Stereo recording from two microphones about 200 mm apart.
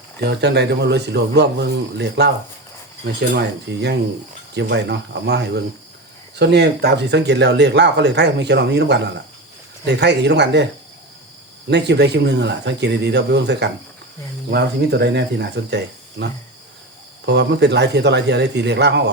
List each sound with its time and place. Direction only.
0.2 s speech: 55° right (ahead or behind)
11.7 s speech: 55° right (ahead or behind)